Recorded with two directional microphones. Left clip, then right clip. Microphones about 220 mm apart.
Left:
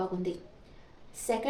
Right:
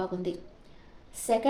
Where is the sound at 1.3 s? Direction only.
40° right (ahead or behind).